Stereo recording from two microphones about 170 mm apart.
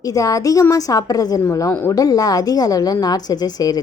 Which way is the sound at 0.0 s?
20° left (ahead or behind).